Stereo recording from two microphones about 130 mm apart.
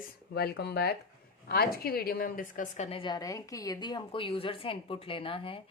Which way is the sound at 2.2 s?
90° left.